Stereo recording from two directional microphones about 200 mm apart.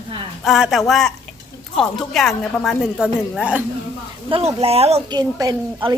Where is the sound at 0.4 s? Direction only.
Centre (ahead or behind).